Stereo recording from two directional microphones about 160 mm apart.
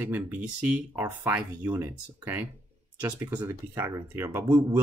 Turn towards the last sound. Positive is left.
turn(degrees=-15)  # may be behind; listen again after turning